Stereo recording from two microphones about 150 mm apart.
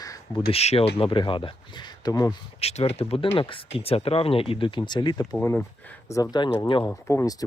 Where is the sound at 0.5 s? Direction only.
45° left (ahead or behind); by 2.3 s 25° left (ahead or behind).